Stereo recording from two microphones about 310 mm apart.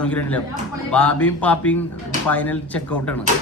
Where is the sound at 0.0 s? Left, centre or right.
Centre.